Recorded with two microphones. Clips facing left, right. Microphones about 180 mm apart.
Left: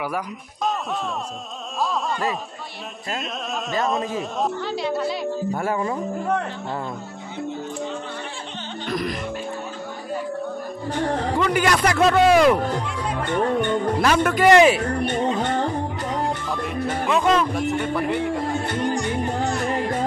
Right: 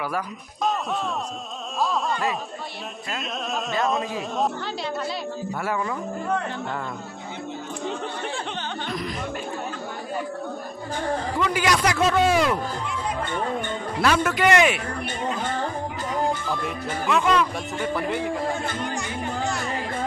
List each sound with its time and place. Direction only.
1.8 s a man's voice: centre (ahead or behind)
3.8 s a man's voice: centre (ahead or behind)
10.9 s a man's voice: 60° left (ahead or behind)
14.0 s a man's voice: 45° left (ahead or behind)
14.6 s speech: 35° left (ahead or behind)
16.4 s a man's voice: centre (ahead or behind)
17.2 s speech: 40° left (ahead or behind)
17.6 s a man's voice: centre (ahead or behind)